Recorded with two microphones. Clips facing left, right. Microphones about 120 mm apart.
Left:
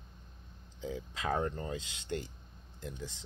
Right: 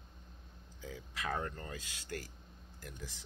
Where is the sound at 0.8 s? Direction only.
20° left (ahead or behind).